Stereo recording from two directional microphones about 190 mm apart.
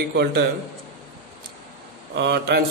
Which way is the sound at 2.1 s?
60° right (ahead or behind).